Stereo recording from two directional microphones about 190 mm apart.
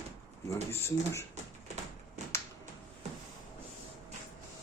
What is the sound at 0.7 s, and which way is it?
Speech, 15° left (ahead or behind).